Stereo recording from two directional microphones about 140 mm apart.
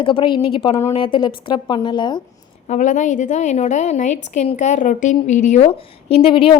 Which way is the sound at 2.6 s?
60° left (ahead or behind).